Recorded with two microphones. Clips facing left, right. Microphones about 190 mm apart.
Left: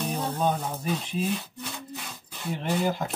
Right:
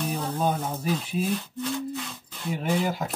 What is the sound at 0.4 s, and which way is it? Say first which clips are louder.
Speech: right 1 dB; 5° right (ahead or behind).